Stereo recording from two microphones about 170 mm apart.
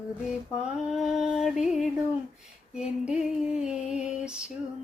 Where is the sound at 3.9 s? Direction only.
5° right (ahead or behind).